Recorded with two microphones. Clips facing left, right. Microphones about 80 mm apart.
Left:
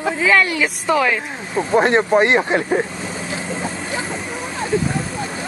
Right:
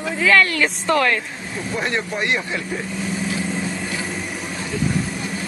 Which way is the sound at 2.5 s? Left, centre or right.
Left.